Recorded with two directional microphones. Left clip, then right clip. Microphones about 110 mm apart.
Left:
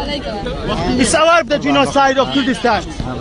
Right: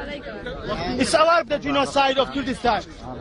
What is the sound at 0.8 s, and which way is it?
Speech, 25° right (ahead or behind).